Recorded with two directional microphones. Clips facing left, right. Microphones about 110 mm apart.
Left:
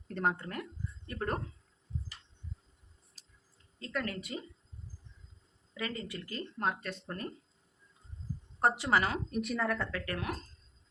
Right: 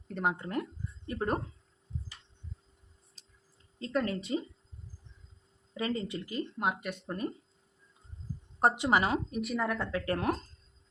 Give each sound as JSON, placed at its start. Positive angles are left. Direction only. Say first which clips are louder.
{"t": 0.1, "sound": "speech", "louder": "even", "side_deg": -5}
{"t": 0.4, "sound": "speech", "louder": "right 5 dB", "side_deg": -20}
{"t": 3.2, "sound": "a sound", "louder": "right 2 dB", "side_deg": 5}
{"t": 3.8, "sound": "speech", "louder": "right 5 dB", "side_deg": -25}
{"t": 5.7, "sound": "speech", "louder": "right 5 dB", "side_deg": -25}
{"t": 8.6, "sound": "speech", "louder": "right 2 dB", "side_deg": -20}
{"t": 9.3, "sound": "speech", "louder": "right 1 dB", "side_deg": -5}
{"t": 9.6, "sound": "speech", "louder": "right 1 dB", "side_deg": -15}
{"t": 10.1, "sound": "speech", "louder": "right 11 dB", "side_deg": -40}